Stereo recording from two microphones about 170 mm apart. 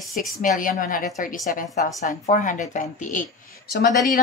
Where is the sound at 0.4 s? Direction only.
55° left (ahead or behind).